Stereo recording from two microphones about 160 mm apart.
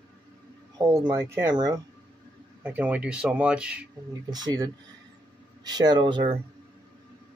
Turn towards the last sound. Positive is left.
turn(degrees=-30)  # may be behind; listen again after turning